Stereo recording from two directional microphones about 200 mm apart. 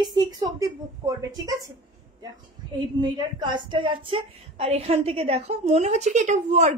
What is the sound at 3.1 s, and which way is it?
A woman's voice, 20° right (ahead or behind).